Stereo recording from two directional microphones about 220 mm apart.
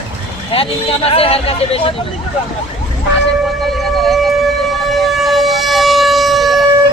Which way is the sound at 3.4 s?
Centre (ahead or behind).